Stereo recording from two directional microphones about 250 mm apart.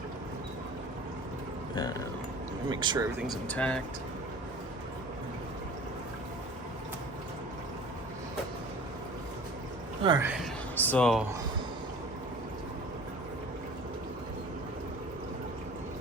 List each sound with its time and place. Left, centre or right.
1.7 s speech: centre
2.6 s speech: centre
3.2 s speech: centre
10.0 s speech: centre
10.8 s speech: centre